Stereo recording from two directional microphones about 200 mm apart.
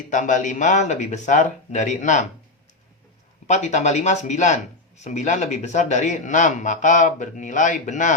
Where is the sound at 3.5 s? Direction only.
35° left (ahead or behind).